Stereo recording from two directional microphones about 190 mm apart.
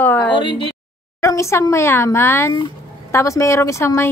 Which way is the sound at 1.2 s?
15° left (ahead or behind).